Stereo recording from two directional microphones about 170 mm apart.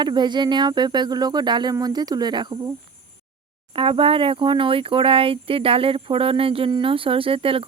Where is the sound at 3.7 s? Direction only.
30° right (ahead or behind).